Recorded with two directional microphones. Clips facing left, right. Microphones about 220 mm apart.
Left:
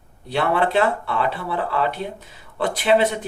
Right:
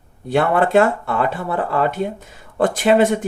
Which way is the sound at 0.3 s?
50° right (ahead or behind).